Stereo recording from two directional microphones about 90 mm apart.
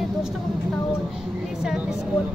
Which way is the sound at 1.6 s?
5° right (ahead or behind).